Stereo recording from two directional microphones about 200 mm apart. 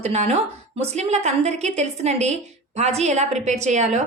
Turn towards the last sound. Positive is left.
turn(degrees=-35)  # may be behind; listen again after turning